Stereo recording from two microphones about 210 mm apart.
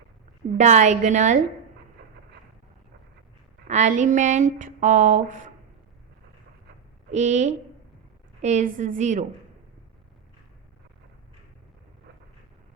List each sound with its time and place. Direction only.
0.5 s speech: 35° right (ahead or behind)
3.7 s speech: 35° right (ahead or behind)
7.1 s speech: 35° right (ahead or behind)